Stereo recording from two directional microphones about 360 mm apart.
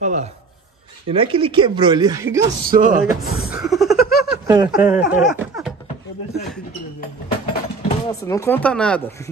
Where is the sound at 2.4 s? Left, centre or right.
Right.